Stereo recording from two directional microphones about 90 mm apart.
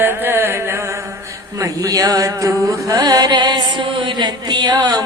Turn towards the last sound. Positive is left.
turn(degrees=-50)  # may be behind; listen again after turning